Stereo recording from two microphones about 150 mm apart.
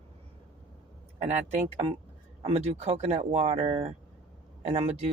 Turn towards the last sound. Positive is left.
turn(degrees=-40)  # may be behind; listen again after turning